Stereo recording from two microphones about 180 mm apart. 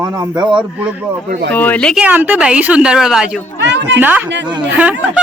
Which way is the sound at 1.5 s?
10° left (ahead or behind).